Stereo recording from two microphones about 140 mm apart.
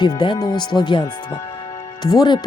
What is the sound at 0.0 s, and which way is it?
Speech, 30° left (ahead or behind).